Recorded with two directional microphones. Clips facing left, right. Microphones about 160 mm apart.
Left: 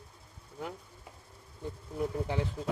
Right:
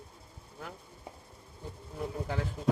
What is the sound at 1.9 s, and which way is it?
Speech, 15° left (ahead or behind).